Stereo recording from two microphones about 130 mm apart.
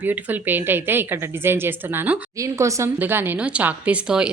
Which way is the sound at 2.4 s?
25° right (ahead or behind).